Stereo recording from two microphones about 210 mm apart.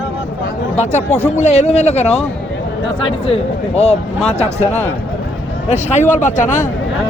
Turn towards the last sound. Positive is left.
turn(degrees=35)  # may be behind; listen again after turning